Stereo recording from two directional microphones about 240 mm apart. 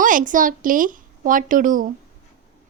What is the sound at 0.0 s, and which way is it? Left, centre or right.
A woman's voice, right.